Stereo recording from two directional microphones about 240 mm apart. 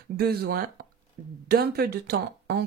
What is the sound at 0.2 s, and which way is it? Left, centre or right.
Speech, right.